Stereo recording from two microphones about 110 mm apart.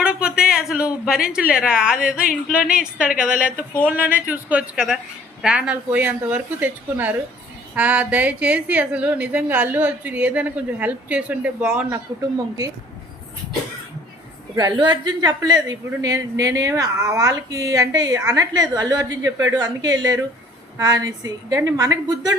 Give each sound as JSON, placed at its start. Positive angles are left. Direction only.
{"t": 0.0, "sound": "a woman's voice", "side_deg": -10}
{"t": 14.5, "sound": "speech", "side_deg": -40}